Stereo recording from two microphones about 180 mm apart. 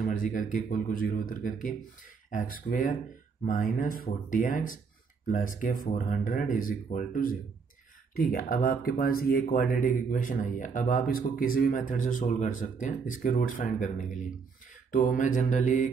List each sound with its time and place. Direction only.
0.0 s speech: 50° left (ahead or behind)